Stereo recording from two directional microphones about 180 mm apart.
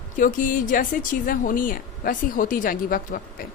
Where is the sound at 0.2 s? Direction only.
50° left (ahead or behind).